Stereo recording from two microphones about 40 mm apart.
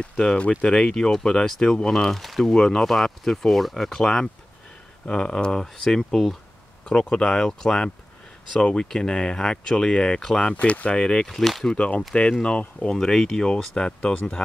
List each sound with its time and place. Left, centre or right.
0.0 s speech: centre
2.5 s speech: centre
5.0 s speech: left
6.8 s speech: left
10.5 s speech: left
11.2 s speech: centre
11.6 s speech: left
12.9 s speech: centre